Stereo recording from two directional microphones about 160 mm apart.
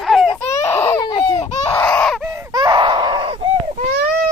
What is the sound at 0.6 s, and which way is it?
Baby cry, 15° left (ahead or behind).